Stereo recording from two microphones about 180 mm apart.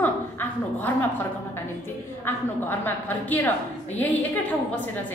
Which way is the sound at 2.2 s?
10° left (ahead or behind).